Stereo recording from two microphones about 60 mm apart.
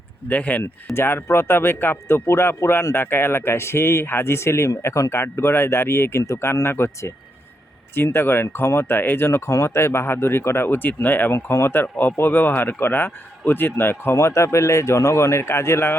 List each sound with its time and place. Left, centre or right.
0.3 s speech: left
0.9 s speech: left
5.2 s speech: left
9.5 s speech: left